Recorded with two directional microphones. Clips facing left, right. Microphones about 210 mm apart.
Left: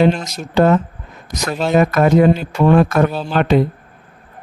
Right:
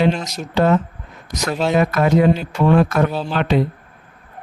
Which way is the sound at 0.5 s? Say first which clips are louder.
Left 3 dB; 50° left (ahead or behind).